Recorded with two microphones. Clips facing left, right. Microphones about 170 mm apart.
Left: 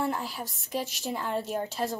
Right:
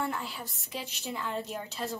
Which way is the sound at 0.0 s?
40° left (ahead or behind).